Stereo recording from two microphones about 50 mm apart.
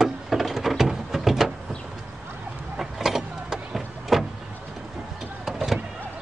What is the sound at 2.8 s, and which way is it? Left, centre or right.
Vehicle, centre.